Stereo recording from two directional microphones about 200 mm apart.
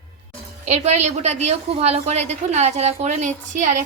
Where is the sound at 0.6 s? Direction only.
35° right (ahead or behind).